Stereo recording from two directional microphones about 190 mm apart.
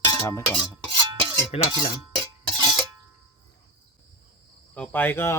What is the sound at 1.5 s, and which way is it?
Speech, 35° left (ahead or behind).